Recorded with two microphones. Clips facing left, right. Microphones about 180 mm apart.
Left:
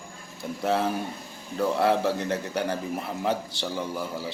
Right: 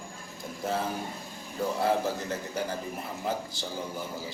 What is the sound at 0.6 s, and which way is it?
A man's voice, 70° left (ahead or behind).